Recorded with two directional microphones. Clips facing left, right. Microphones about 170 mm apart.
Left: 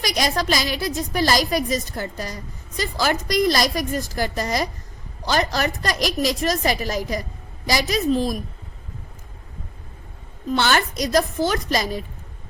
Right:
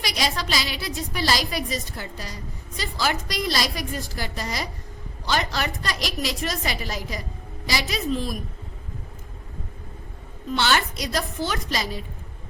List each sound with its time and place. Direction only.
0.0 s a woman's voice: 45° left (ahead or behind)
10.5 s a woman's voice: 50° left (ahead or behind)